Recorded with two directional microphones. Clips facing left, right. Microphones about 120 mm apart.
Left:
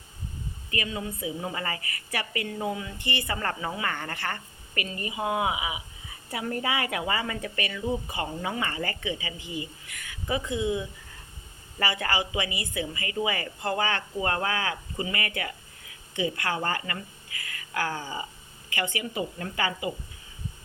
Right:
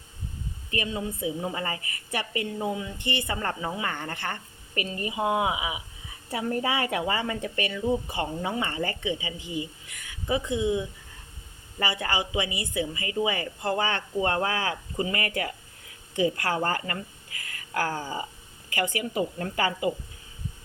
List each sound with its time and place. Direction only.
0.7 s a woman's voice: 30° right (ahead or behind)
5.1 s speech: 5° right (ahead or behind)
6.3 s a woman's voice: 30° right (ahead or behind)
11.8 s a woman's voice: 20° right (ahead or behind); by 19.9 s 40° right (ahead or behind)